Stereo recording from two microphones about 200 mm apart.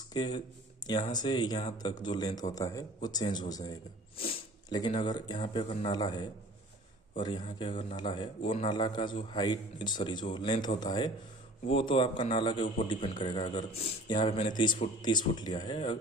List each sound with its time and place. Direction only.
0.1 s a man's voice: 20° left (ahead or behind)
4.2 s a sound: 25° left (ahead or behind)
4.9 s a man's voice: 20° left (ahead or behind)